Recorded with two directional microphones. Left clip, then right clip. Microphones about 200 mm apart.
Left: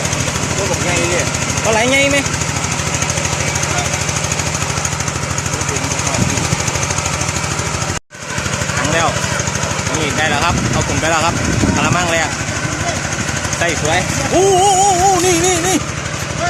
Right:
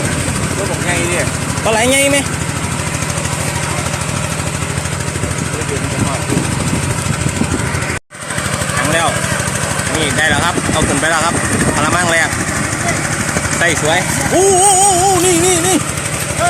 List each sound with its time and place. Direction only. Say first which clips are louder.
1.7 s speech: right 1 dB; 15° right (ahead or behind)
10.2 s vehicle: right 2 dB; 5° right (ahead or behind)
11.0 s speech: right 1 dB; 10° right (ahead or behind)
13.6 s speech: right 2 dB; 10° right (ahead or behind)